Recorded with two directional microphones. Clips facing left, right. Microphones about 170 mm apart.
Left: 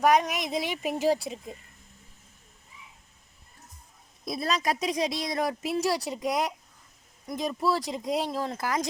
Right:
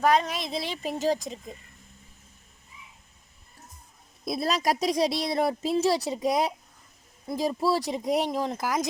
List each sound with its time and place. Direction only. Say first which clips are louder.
0.0 s speech: left 1 dB; 15° left (ahead or behind)
4.3 s speech: right 2 dB; 35° right (ahead or behind); by 8.9 s 10° right (ahead or behind)